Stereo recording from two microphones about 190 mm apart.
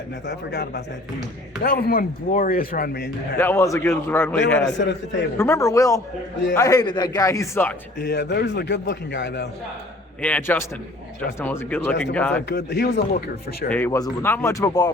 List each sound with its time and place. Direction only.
0.3 s a man's voice: 60° left (ahead or behind)
3.3 s a man's voice: 15° left (ahead or behind)
4.6 s a man's voice: 65° left (ahead or behind)
5.4 s a man's voice: 15° left (ahead or behind)
7.9 s a man's voice: 60° left (ahead or behind)
10.2 s a man's voice: 5° left (ahead or behind)
12.5 s a man's voice: 60° left (ahead or behind)
13.7 s a man's voice: 10° left (ahead or behind)